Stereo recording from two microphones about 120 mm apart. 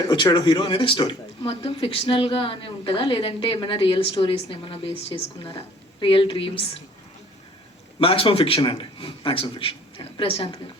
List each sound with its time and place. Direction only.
0.3 s speech: 30° left (ahead or behind); by 6.7 s 50° left (ahead or behind)
7.9 s speech: 50° left (ahead or behind)